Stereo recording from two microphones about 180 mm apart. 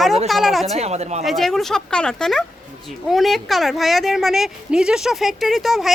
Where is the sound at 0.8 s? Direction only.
35° right (ahead or behind).